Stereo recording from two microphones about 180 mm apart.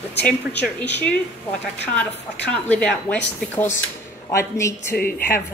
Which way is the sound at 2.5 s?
5° left (ahead or behind).